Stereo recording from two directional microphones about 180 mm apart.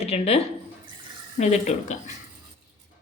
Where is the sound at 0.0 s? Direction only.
35° left (ahead or behind).